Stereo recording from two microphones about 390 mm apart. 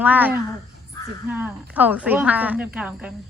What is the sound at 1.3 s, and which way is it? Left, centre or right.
Speech, centre.